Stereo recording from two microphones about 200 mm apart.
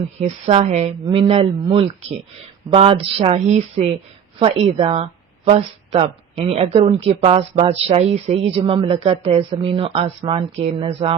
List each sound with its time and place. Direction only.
0.2 s speech: 30° right (ahead or behind)